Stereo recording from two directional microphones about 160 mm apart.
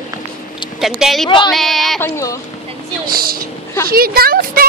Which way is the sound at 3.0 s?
65° right (ahead or behind).